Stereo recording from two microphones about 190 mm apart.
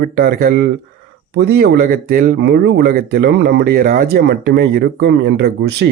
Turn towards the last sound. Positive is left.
turn(degrees=-60)  # may be behind; listen again after turning